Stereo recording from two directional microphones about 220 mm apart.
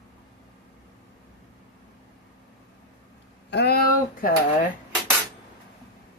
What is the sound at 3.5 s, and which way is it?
Speech, 50° left (ahead or behind).